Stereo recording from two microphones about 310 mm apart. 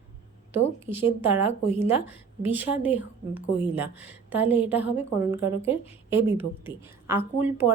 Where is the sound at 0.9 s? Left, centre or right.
Right.